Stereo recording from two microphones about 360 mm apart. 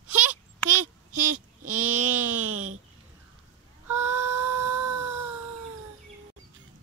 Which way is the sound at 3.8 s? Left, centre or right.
Centre.